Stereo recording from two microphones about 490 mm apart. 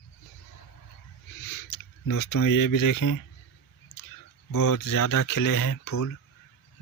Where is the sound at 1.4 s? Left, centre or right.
Left.